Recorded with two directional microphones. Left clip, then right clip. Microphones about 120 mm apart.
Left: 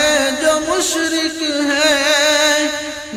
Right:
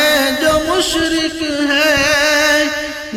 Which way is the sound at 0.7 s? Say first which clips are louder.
Right 2 dB; 25° right (ahead or behind).